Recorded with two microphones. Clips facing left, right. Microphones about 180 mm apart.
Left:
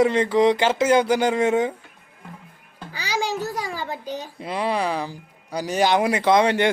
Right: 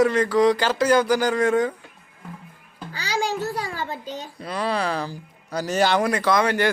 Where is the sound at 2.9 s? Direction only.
10° left (ahead or behind).